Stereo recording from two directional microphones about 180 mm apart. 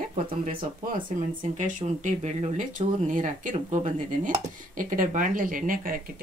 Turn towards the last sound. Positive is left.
turn(degrees=-50)  # may be behind; listen again after turning